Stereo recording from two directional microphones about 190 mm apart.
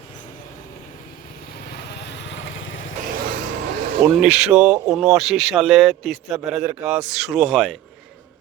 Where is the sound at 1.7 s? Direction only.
60° left (ahead or behind); by 2.8 s 85° left.